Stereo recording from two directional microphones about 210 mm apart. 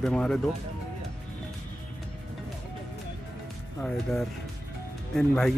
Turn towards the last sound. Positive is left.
turn(degrees=0)  # may be behind; listen again after turning